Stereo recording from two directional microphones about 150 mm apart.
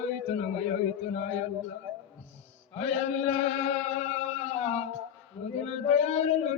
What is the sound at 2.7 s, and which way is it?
Chant, 45° left (ahead or behind).